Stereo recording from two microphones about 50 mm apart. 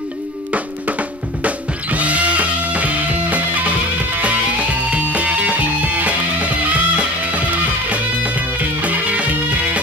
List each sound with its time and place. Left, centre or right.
1.4 s music: right